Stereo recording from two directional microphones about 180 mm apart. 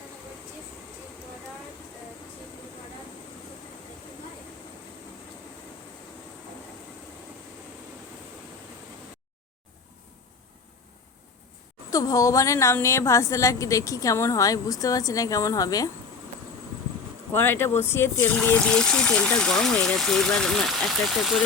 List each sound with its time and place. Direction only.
11.9 s a woman's voice: 20° left (ahead or behind)
17.3 s speech: 10° left (ahead or behind)